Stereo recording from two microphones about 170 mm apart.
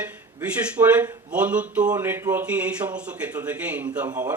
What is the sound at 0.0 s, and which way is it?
Speech, 10° right (ahead or behind).